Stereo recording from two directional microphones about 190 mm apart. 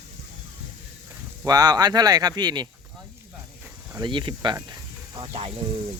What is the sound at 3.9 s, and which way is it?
Speech, 25° right (ahead or behind).